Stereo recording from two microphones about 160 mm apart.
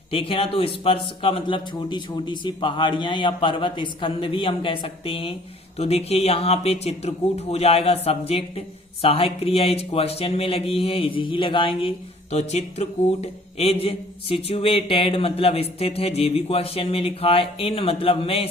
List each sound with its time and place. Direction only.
0.1 s speech: 35° left (ahead or behind)